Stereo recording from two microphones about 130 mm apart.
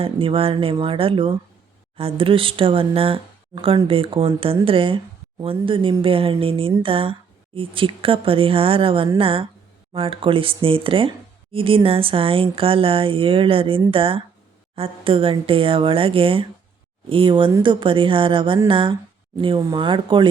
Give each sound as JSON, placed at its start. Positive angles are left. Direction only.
{"t": 0.0, "sound": "a woman's voice", "side_deg": -45}